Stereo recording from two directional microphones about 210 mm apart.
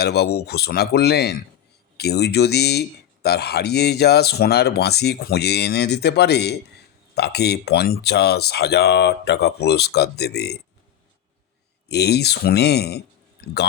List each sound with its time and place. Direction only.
0.0 s speech: 50° left (ahead or behind)
11.9 s speech: 50° left (ahead or behind)